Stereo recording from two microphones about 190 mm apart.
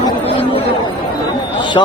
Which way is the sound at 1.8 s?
20° left (ahead or behind).